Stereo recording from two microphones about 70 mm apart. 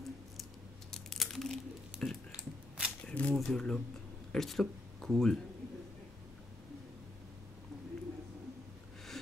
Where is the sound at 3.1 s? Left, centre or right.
Centre.